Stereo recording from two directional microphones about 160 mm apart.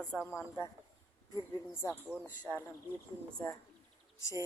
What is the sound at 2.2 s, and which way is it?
Speech, 5° left (ahead or behind).